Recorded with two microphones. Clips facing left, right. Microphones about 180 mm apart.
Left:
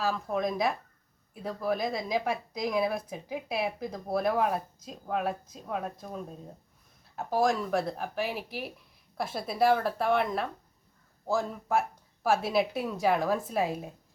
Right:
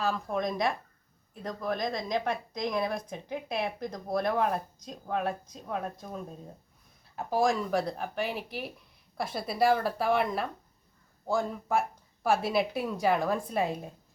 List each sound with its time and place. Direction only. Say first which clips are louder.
0.0 s a woman's voice: left 1 dB; 5° left (ahead or behind)